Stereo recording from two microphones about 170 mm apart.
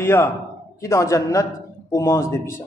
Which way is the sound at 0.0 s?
15° left (ahead or behind).